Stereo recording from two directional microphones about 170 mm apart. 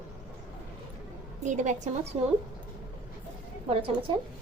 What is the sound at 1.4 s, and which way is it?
Speech, 45° right (ahead or behind).